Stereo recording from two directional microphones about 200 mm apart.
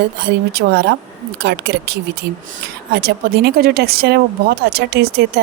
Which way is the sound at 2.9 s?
55° right (ahead or behind).